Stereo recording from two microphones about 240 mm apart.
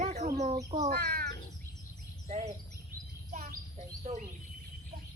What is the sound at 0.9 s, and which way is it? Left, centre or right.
Speech, right.